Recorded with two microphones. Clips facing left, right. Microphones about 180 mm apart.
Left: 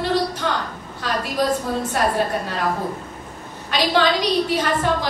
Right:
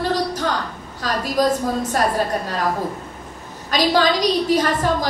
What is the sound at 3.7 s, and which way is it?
Speech, 40° right (ahead or behind).